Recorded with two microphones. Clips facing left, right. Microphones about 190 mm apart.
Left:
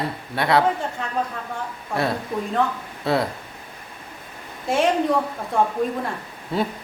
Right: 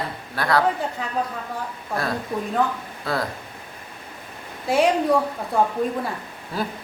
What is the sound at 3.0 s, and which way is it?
Speech, 25° left (ahead or behind).